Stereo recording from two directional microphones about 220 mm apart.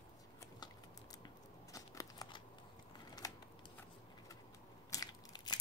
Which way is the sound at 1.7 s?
15° left (ahead or behind).